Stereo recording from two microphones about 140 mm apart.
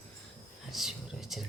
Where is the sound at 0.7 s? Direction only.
Centre (ahead or behind).